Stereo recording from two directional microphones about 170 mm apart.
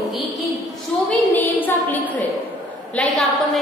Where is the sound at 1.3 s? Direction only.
10° left (ahead or behind).